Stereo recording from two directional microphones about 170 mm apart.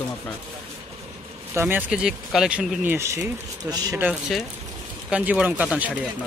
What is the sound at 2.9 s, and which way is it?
Speech, 15° right (ahead or behind).